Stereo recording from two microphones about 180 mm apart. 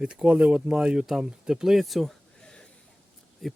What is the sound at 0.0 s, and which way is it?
Speech, 5° right (ahead or behind).